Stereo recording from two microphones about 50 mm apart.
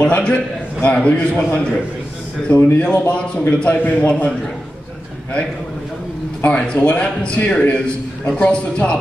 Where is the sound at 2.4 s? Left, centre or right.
Left.